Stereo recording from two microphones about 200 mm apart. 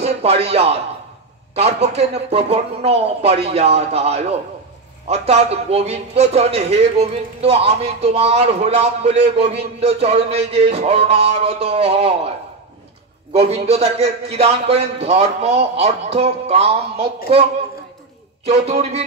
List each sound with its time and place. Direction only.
0.0 s a man's voice: 30° right (ahead or behind)
13.3 s a man's voice: 30° right (ahead or behind)
18.5 s a man's voice: 30° right (ahead or behind)